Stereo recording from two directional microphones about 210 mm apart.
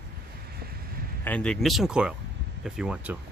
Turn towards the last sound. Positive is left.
turn(degrees=-5)  # may be behind; listen again after turning